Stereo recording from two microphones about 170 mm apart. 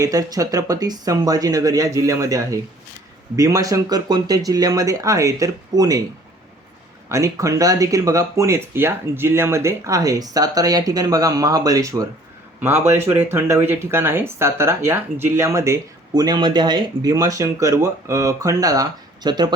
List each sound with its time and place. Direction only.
0.0 s speech: 20° right (ahead or behind)
7.1 s speech: 20° right (ahead or behind)